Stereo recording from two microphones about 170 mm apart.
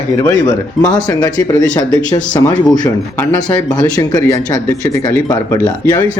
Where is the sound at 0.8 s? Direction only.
5° left (ahead or behind).